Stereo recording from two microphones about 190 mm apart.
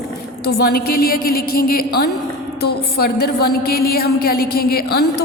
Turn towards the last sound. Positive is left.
turn(degrees=55)  # may be behind; listen again after turning